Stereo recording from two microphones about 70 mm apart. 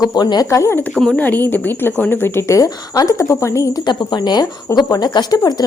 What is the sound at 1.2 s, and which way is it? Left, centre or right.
A woman's voice, left.